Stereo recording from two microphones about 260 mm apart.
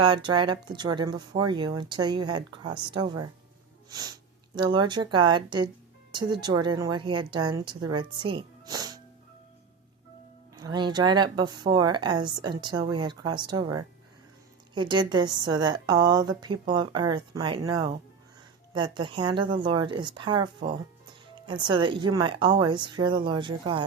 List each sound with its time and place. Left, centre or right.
0.0 s speech: centre
3.8 s sneeze: centre
4.5 s speech: centre
10.5 s speech: centre